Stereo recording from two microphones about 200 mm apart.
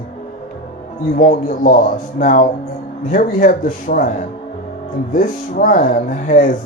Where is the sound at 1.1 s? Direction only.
40° left (ahead or behind).